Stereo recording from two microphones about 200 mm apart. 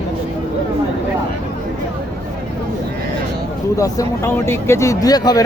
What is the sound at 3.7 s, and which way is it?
Speech, 15° left (ahead or behind).